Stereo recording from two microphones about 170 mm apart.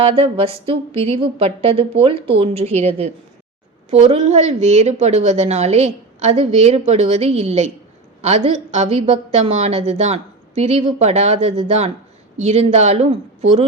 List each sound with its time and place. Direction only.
0.0 s a woman's voice: 35° right (ahead or behind)